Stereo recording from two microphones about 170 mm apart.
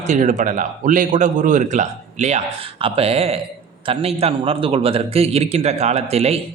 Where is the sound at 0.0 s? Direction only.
45° right (ahead or behind).